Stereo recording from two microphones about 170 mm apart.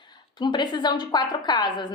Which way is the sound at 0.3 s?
25° left (ahead or behind).